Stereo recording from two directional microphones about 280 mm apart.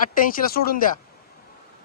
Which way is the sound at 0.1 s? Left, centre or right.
Left.